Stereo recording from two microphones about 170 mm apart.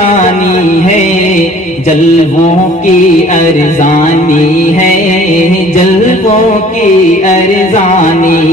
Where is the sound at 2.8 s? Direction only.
45° left (ahead or behind).